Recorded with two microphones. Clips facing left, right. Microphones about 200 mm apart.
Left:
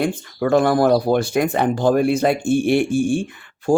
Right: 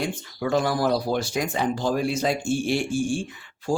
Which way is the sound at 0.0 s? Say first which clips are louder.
Left 7 dB; 55° left (ahead or behind).